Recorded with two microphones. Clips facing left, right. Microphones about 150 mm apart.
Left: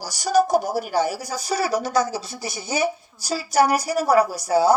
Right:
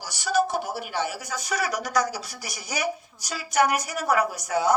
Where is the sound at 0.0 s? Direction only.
40° left (ahead or behind).